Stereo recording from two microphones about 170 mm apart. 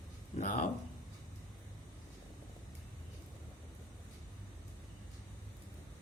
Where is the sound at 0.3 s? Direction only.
50° left (ahead or behind).